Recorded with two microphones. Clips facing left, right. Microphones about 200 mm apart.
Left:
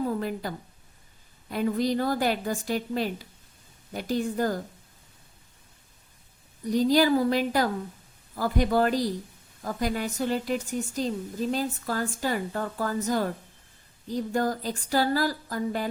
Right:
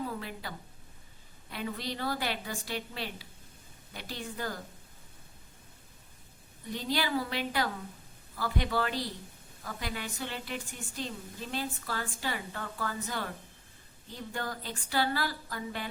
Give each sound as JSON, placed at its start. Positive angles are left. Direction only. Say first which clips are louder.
{"t": 0.0, "sound": "a woman's voice", "louder": "left 9 dB", "side_deg": 45}
{"t": 6.7, "sound": "a woman's voice", "louder": "left 12 dB", "side_deg": 40}